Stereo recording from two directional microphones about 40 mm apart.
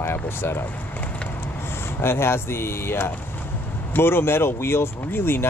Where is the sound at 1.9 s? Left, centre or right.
Left.